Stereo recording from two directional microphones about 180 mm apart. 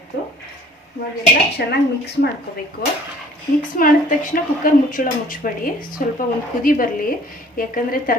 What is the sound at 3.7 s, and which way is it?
A woman's voice, 50° left (ahead or behind).